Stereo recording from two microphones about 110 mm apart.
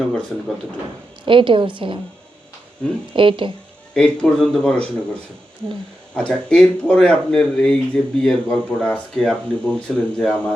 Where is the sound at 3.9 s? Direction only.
5° left (ahead or behind).